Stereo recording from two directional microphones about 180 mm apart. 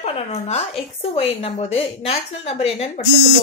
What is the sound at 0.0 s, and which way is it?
Speech, 35° left (ahead or behind).